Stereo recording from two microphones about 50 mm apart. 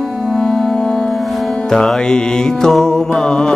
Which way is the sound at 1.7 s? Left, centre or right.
Centre.